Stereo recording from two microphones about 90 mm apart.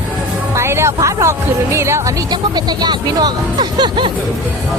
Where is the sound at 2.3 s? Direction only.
50° right (ahead or behind).